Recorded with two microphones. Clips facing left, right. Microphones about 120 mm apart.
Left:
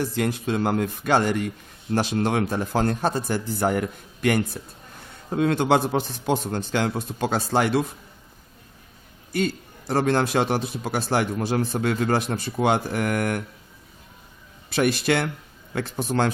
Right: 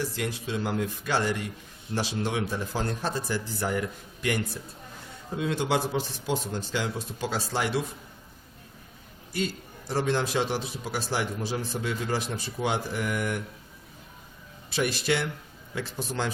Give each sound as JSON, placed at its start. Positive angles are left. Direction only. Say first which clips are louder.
{"t": 0.0, "sound": "a man's voice", "louder": "left 7 dB", "side_deg": 55}
{"t": 9.3, "sound": "a man's voice", "louder": "left 6 dB", "side_deg": 55}
{"t": 14.7, "sound": "a man's voice", "louder": "left 5 dB", "side_deg": 55}